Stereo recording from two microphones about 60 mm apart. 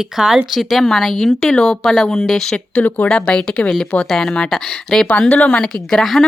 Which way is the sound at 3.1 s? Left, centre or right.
Centre.